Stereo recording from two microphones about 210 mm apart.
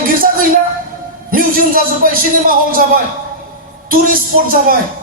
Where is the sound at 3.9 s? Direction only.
40° right (ahead or behind).